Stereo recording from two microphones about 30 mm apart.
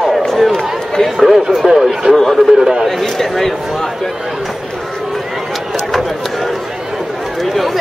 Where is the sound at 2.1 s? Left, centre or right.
Centre.